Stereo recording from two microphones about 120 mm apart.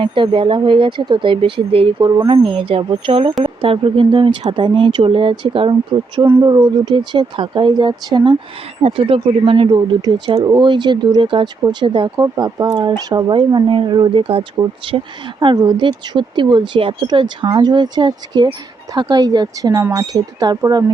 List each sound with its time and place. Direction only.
0.0 s speech: 45° right (ahead or behind)
12.2 s speech: 30° right (ahead or behind)